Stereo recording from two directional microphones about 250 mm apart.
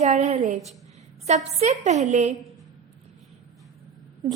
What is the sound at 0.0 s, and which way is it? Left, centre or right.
A woman's voice, right.